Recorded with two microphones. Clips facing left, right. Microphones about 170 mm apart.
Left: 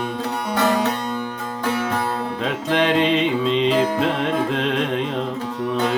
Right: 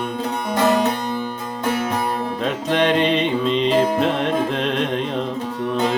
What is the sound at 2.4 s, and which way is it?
Music, 5° left (ahead or behind).